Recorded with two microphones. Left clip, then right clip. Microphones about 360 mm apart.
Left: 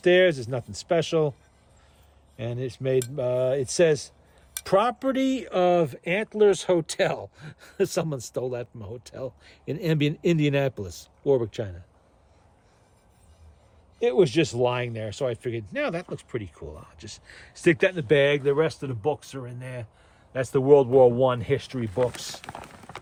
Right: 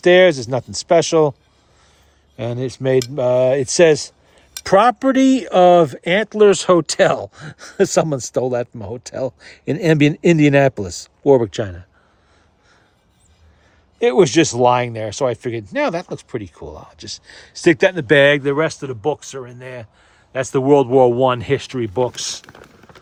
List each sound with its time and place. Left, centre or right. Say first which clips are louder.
0.0 s speech: right 8 dB; centre
2.4 s speech: right 9 dB; centre
14.0 s speech: right 8 dB; right